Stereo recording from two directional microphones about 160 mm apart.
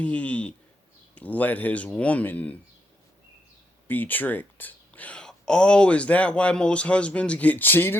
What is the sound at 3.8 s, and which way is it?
Speech, 10° left (ahead or behind).